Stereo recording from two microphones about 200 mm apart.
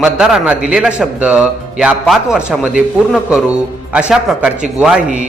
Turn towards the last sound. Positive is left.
turn(degrees=-5)  # may be behind; listen again after turning